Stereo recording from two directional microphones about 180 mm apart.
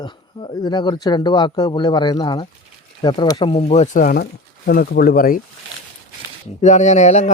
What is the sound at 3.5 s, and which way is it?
Speech, 35° left (ahead or behind).